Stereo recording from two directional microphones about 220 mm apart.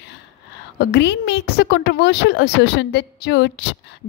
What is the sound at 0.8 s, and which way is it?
A woman's voice, 50° left (ahead or behind).